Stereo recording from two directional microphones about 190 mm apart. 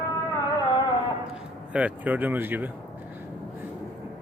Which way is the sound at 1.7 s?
10° right (ahead or behind).